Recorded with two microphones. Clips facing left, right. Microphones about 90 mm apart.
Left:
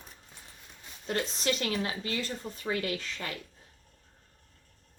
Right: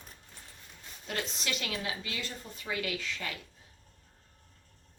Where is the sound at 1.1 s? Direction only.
35° left (ahead or behind).